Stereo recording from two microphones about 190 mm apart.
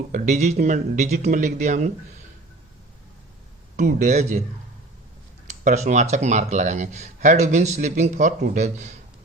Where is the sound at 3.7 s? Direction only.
40° right (ahead or behind).